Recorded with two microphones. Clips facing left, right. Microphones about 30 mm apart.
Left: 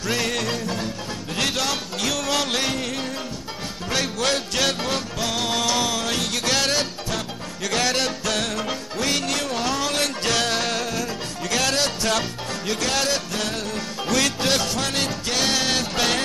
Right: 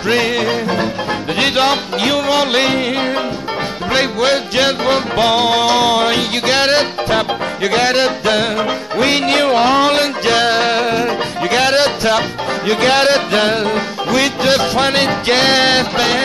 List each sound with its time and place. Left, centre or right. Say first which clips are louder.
0.1 s music: right 9 dB; right
5.1 s music: right 12 dB; right
10.2 s music: right 10 dB; right
12.8 s music: right 12 dB; right
14.1 s music: right 8 dB; right
14.8 s music: right 11 dB; right